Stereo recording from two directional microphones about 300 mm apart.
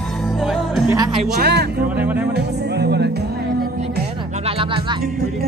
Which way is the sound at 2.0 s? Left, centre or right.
Centre.